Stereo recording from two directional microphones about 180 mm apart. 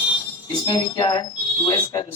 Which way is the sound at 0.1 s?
25° left (ahead or behind).